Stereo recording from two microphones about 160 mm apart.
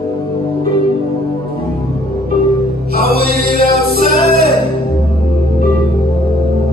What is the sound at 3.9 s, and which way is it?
Music, 70° right (ahead or behind).